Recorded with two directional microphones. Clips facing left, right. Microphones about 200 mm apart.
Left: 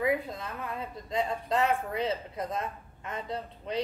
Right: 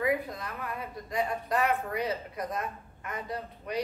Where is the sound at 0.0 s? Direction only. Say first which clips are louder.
Even; 25° left (ahead or behind).